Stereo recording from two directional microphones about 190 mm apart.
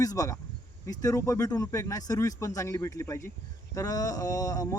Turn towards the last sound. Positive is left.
turn(degrees=20)  # may be behind; listen again after turning